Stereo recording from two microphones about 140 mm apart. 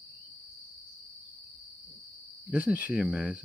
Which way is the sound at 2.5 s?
10° right (ahead or behind).